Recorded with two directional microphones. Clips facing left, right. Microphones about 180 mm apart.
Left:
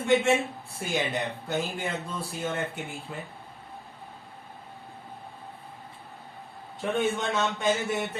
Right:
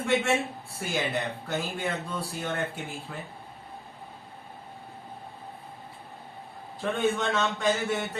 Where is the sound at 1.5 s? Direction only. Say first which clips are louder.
Left 1 dB; 15° left (ahead or behind).